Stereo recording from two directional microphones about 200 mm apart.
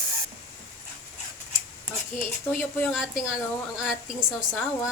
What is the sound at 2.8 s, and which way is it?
Speech, 5° right (ahead or behind).